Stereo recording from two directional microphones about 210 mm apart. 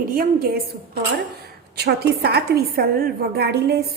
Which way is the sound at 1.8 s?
50° right (ahead or behind).